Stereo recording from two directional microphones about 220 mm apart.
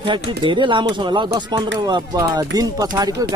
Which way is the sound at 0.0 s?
20° right (ahead or behind).